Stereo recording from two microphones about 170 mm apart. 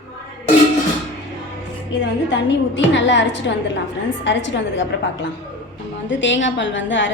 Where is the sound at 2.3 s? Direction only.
90° left.